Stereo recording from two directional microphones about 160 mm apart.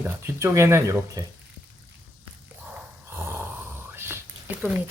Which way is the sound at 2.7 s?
15° right (ahead or behind).